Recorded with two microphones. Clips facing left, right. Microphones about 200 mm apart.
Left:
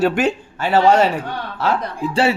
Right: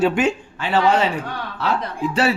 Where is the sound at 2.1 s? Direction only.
30° left (ahead or behind).